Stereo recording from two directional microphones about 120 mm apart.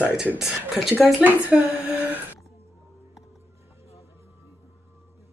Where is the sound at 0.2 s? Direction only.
5° right (ahead or behind).